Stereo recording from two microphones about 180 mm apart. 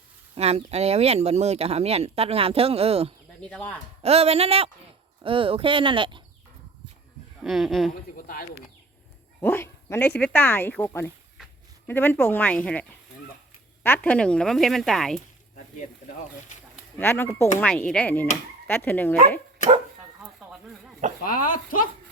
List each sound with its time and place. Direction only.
0.3 s speech: 35° right (ahead or behind)
3.4 s speech: 5° left (ahead or behind)
4.0 s speech: 35° right (ahead or behind)
7.4 s speech: centre (ahead or behind)
8.1 s speech: 55° left (ahead or behind)
9.4 s speech: 10° left (ahead or behind)
13.8 s speech: 10° left (ahead or behind)
17.0 s speech: 10° left (ahead or behind)
20.2 s a sound: 5° right (ahead or behind)
21.2 s speech: 50° left (ahead or behind)